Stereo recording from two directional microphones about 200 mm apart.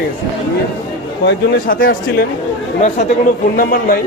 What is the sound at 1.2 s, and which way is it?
A man's voice, 45° left (ahead or behind).